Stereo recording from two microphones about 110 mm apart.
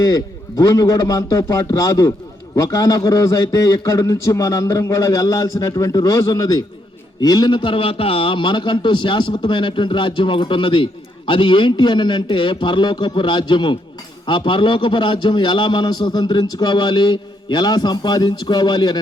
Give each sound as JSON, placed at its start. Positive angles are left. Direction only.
{"t": 0.0, "sound": "a man's voice", "side_deg": 35}